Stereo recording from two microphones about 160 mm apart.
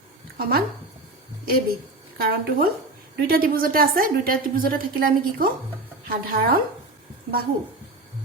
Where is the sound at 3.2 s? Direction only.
65° right (ahead or behind).